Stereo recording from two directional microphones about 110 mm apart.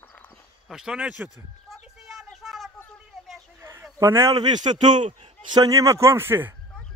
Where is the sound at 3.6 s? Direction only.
25° right (ahead or behind).